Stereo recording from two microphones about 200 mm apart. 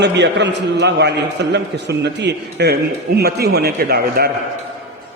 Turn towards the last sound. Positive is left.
turn(degrees=-50)  # may be behind; listen again after turning